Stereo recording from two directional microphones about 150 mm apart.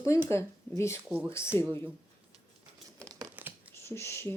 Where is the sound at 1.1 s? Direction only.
10° right (ahead or behind).